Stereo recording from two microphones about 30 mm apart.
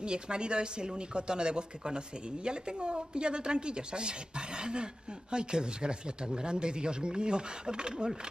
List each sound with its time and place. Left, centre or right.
0.0 s speech: right